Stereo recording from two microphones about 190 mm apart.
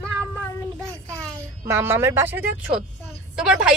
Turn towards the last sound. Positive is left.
turn(degrees=-5)  # may be behind; listen again after turning